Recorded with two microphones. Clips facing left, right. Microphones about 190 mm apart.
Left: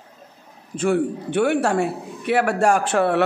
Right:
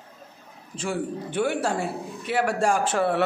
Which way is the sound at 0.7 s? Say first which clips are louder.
Left 8 dB; 65° left (ahead or behind).